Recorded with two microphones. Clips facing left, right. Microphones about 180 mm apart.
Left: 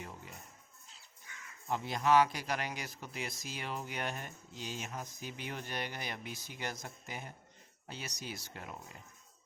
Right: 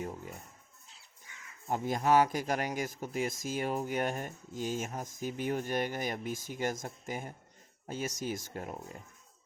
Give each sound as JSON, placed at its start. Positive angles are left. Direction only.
{"t": 0.0, "sound": "speech", "side_deg": -45}
{"t": 1.6, "sound": "speech", "side_deg": -45}